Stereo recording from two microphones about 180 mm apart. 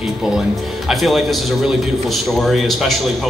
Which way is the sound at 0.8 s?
Centre (ahead or behind).